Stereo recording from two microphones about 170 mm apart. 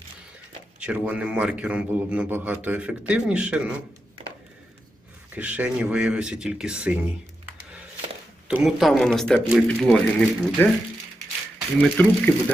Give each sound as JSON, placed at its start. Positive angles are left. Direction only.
{"t": 0.8, "sound": "a man's voice", "side_deg": -10}
{"t": 5.3, "sound": "speech", "side_deg": -10}
{"t": 8.4, "sound": "speech", "side_deg": -5}
{"t": 11.8, "sound": "speech", "side_deg": 10}